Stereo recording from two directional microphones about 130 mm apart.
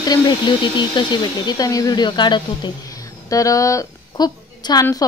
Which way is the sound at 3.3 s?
25° left (ahead or behind).